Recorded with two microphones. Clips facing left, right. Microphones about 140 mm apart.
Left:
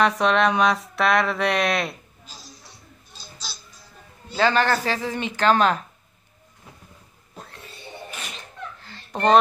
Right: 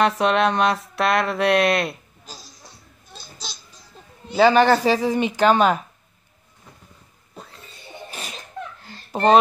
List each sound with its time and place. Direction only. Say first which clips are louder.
0.0 s speech: right 1 dB; centre (ahead or behind)
4.3 s speech: right 6 dB; 15° right (ahead or behind)
8.6 s a sound: right 4 dB; 50° right (ahead or behind)
9.1 s speech: right 2 dB; 5° right (ahead or behind)